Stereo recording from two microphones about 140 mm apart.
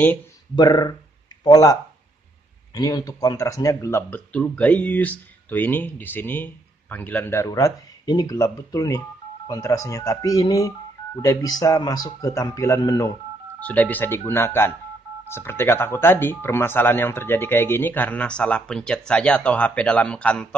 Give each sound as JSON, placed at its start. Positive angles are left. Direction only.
{"t": 0.6, "sound": "speech", "side_deg": 30}
{"t": 13.6, "sound": "speech", "side_deg": 10}